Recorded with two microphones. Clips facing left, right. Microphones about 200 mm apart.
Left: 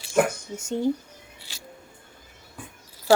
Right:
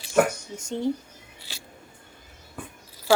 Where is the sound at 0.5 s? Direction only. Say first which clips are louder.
Left 3 dB; 5° left (ahead or behind).